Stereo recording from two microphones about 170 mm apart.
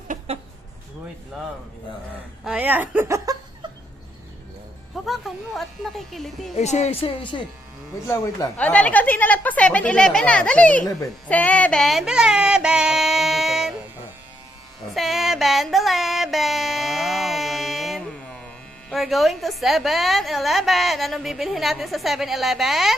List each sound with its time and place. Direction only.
2.4 s speech: 5° right (ahead or behind)
5.0 s a woman's voice: centre (ahead or behind)
6.6 s speech: 40° left (ahead or behind)
8.0 s speech: 20° left (ahead or behind)
8.5 s a woman's voice: 10° left (ahead or behind)
14.9 s music: centre (ahead or behind)
18.9 s a woman's voice: centre (ahead or behind)